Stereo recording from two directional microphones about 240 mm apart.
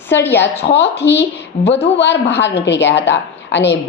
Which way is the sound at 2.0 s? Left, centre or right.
Left.